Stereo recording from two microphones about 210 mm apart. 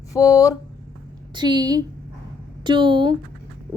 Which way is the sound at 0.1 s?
15° left (ahead or behind).